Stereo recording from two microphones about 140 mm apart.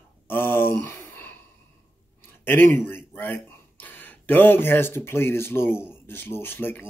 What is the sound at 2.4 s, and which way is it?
A man's voice, 15° left (ahead or behind).